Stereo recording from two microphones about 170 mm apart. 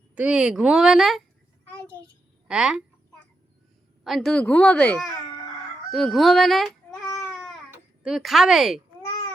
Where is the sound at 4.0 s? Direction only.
Centre (ahead or behind).